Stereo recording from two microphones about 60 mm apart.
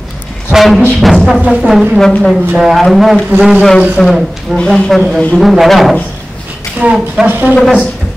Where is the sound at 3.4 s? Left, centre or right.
Centre.